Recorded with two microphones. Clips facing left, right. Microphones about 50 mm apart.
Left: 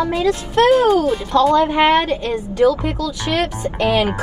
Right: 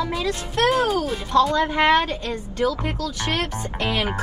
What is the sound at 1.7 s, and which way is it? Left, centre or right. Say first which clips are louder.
Speech: left 4 dB; left.